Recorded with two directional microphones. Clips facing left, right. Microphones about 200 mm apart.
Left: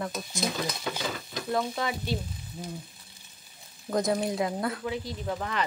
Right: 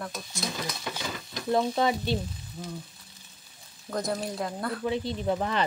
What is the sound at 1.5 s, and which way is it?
Speech, 25° right (ahead or behind).